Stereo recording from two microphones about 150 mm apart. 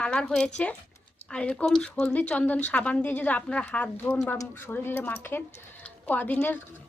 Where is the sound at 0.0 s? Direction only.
5° left (ahead or behind).